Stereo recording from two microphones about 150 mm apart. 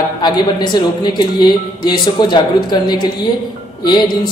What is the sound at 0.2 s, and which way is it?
A man's voice, 30° left (ahead or behind).